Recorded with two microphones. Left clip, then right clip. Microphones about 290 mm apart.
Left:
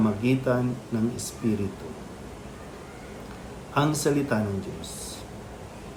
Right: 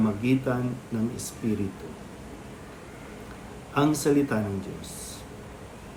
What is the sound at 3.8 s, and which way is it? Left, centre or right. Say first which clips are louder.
Speech: right 1 dB; centre.